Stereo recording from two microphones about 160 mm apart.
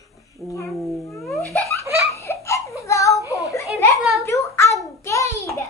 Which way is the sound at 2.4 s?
20° left (ahead or behind).